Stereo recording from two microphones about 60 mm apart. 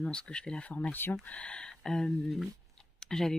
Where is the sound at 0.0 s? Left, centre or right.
Centre.